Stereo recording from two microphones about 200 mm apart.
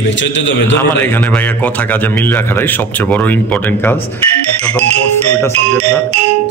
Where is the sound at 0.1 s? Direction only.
65° left (ahead or behind).